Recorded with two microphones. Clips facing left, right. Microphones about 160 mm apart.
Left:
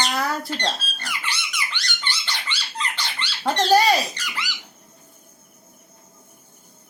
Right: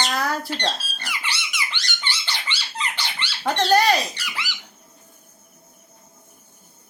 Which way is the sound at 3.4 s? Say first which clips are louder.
Left 1 dB; 5° left (ahead or behind).